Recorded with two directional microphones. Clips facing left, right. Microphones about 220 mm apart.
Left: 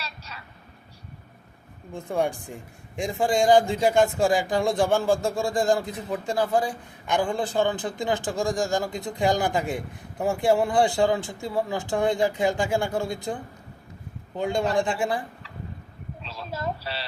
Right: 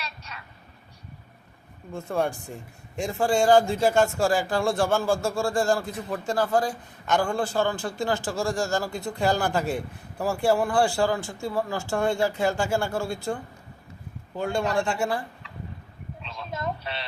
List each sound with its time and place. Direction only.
1.9 s speech: 15° left (ahead or behind)
16.5 s speech: 30° left (ahead or behind)